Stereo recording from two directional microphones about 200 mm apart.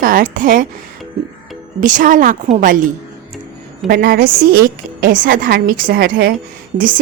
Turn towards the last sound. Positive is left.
turn(degrees=-45)  # may be behind; listen again after turning